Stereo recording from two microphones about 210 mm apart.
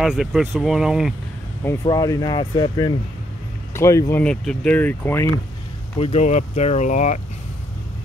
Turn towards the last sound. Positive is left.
turn(degrees=35)  # may be behind; listen again after turning